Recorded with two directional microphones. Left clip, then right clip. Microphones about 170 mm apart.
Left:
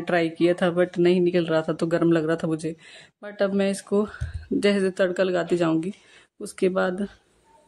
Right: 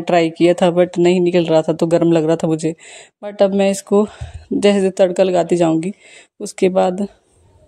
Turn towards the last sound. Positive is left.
turn(degrees=-25)  # may be behind; listen again after turning